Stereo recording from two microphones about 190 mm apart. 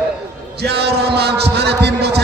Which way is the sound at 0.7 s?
60° right (ahead or behind).